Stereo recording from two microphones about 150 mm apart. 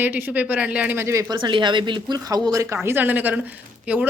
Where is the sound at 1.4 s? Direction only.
30° right (ahead or behind); by 4.0 s 10° right (ahead or behind).